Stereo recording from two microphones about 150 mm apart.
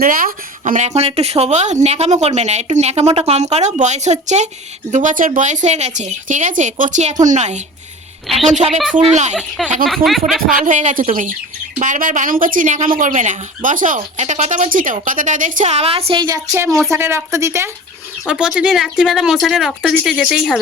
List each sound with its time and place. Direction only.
0.0 s speech: 70° right (ahead or behind); by 7.6 s 50° right (ahead or behind)
8.3 s speech: centre (ahead or behind)
10.5 s speech: 55° right (ahead or behind); by 16.2 s 40° right (ahead or behind)
16.2 s speech: 25° right (ahead or behind)
16.6 s speech: centre (ahead or behind)
16.9 s speech: 15° right (ahead or behind)
18.3 s speech: 5° right (ahead or behind)